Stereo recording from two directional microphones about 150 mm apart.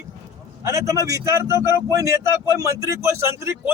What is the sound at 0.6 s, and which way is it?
A man's voice, 20° right (ahead or behind).